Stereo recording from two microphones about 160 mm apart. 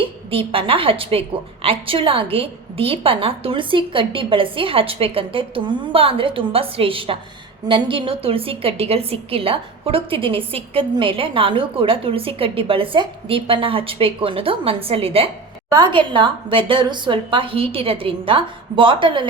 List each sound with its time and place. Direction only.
0.0 s a woman's voice: 35° right (ahead or behind)